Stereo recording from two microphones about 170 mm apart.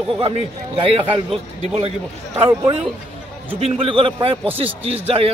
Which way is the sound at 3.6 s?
35° right (ahead or behind).